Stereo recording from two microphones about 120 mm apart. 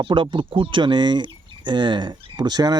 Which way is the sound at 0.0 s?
45° right (ahead or behind).